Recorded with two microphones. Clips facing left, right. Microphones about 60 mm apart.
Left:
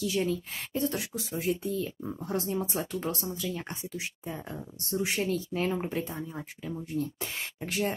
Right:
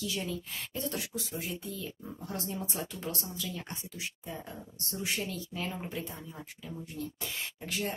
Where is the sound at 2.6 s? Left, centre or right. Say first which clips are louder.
Left 6 dB; left.